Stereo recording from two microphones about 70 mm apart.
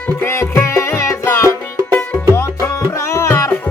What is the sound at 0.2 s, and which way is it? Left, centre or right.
Music, left.